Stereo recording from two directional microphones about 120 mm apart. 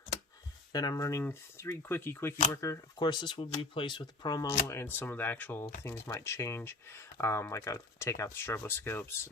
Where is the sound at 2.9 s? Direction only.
40° left (ahead or behind).